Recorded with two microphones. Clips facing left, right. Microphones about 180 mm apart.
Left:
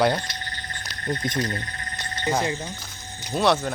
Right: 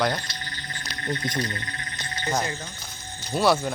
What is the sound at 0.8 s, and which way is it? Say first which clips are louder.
Wild animals: left 1 dB; 40° left (ahead or behind).